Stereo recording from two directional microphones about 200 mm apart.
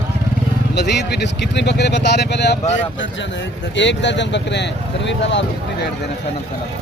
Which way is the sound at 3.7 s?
60° left (ahead or behind).